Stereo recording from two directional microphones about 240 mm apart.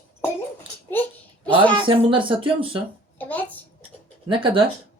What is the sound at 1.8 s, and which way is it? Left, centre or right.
Speech, right.